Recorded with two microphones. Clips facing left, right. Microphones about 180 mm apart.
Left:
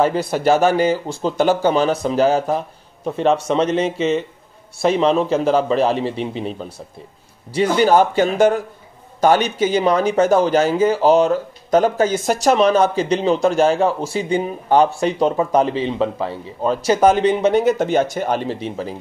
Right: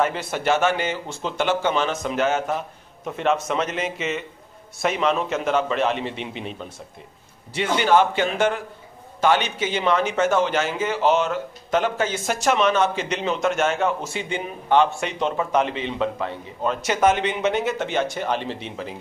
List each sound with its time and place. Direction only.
0.0 s speech: 35° left (ahead or behind)